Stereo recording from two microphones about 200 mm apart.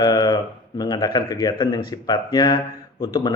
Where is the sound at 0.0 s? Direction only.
20° left (ahead or behind).